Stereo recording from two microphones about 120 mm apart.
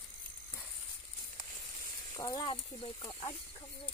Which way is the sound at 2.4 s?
45° left (ahead or behind).